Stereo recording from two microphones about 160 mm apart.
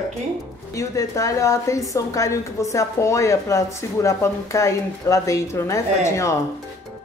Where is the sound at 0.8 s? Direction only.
20° left (ahead or behind).